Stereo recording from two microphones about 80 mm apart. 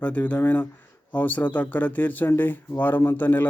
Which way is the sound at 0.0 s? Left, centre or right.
Centre.